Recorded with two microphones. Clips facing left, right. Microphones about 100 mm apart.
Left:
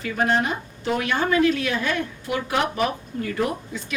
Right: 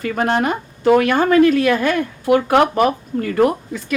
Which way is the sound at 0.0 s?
55° right (ahead or behind).